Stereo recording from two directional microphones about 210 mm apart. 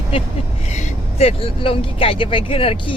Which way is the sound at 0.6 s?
30° left (ahead or behind).